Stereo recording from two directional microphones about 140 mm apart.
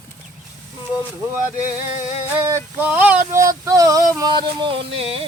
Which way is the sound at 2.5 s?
15° right (ahead or behind).